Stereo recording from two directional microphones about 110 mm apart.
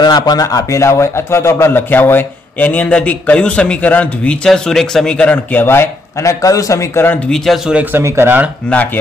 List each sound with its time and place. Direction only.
0.0 s a man's voice: 40° left (ahead or behind); by 7.2 s 20° left (ahead or behind)
7.2 s speech: 5° left (ahead or behind)
7.8 s speech: 20° right (ahead or behind)